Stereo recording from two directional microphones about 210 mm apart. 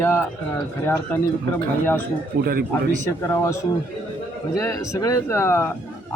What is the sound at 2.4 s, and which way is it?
Speech, 45° right (ahead or behind).